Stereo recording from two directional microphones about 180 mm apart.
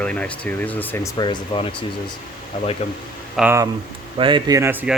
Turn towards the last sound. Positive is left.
turn(degrees=-10)  # may be behind; listen again after turning